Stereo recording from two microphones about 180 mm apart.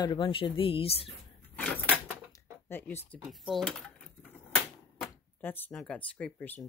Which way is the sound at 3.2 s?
Centre (ahead or behind).